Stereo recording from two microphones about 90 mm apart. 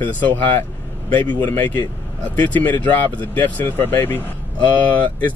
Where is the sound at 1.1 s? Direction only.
20° left (ahead or behind).